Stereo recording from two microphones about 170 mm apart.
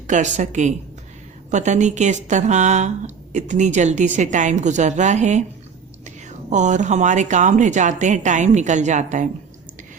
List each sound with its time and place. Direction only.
0.1 s speech: 45° right (ahead or behind)